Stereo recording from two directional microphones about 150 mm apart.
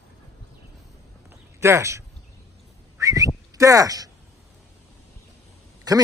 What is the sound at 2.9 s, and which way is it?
Whistling, 20° right (ahead or behind).